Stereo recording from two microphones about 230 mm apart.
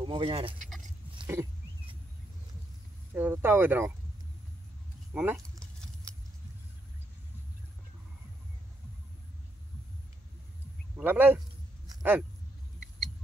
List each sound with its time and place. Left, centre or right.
0.0 s speech: right
1.2 s wild animals: centre
3.2 s speech: centre
5.1 s speech: centre
11.0 s speech: centre